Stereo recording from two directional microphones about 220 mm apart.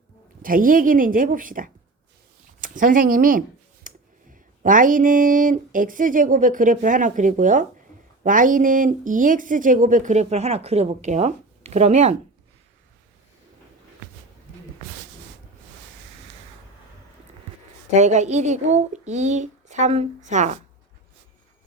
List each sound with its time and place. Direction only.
0.4 s speech: 40° right (ahead or behind)
17.9 s speech: 30° right (ahead or behind)